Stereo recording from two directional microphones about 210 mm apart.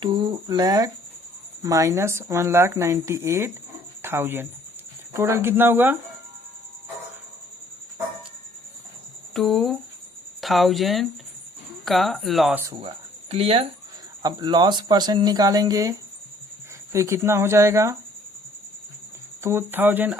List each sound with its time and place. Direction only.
0.0 s speech: 20° right (ahead or behind)
9.3 s speech: centre (ahead or behind)
13.3 s speech: 30° right (ahead or behind)
19.4 s speech: 10° right (ahead or behind)